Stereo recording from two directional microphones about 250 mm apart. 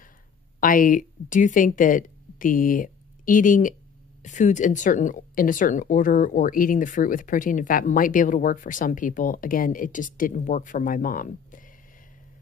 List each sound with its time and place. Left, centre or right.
0.6 s speech: left